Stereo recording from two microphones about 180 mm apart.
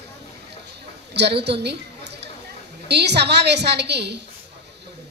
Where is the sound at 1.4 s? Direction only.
70° right (ahead or behind).